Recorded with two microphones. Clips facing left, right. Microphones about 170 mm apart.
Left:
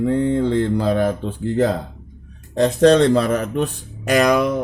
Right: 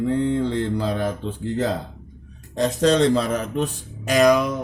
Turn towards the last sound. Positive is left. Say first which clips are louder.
# left 1 dB
turn(degrees=60)  # may be behind; listen again after turning